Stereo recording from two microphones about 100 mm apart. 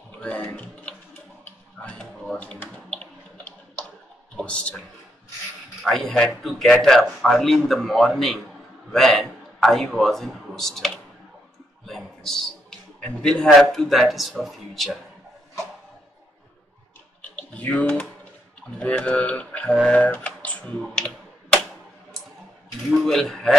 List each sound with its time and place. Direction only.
0.2 s a sound: 15° left (ahead or behind)
2.3 s typing: 10° left (ahead or behind)
4.4 s a man's voice: 10° left (ahead or behind)
5.8 s a man's voice: centre (ahead or behind)
17.4 s typing: 15° left (ahead or behind)
18.8 s speech: 10° left (ahead or behind)
19.7 s speech: centre (ahead or behind)
20.0 s typing: 15° left (ahead or behind)
20.8 s computer keyboard: centre (ahead or behind)
23.0 s speech: 5° left (ahead or behind)